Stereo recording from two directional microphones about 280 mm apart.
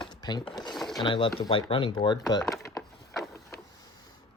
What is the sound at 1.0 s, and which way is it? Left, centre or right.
Speech, centre.